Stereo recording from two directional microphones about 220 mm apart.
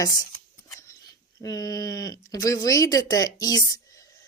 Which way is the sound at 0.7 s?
15° left (ahead or behind).